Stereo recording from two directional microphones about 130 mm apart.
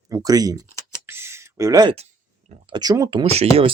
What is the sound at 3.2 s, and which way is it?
Speech, 50° right (ahead or behind).